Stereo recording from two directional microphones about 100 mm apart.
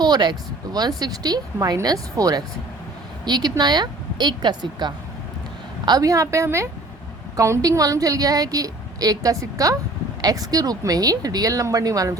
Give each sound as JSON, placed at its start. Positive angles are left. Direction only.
{"t": 0.0, "sound": "a woman's voice", "side_deg": -45}